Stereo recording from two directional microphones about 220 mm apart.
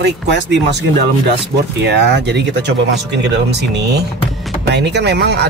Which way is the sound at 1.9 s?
50° right (ahead or behind).